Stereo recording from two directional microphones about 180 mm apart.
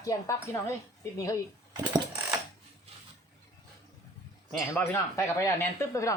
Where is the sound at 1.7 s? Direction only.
20° right (ahead or behind).